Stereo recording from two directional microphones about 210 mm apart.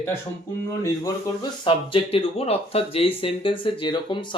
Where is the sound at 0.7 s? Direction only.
15° left (ahead or behind).